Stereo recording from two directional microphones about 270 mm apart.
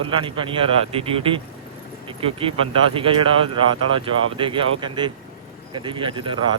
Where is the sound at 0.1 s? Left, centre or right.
Centre.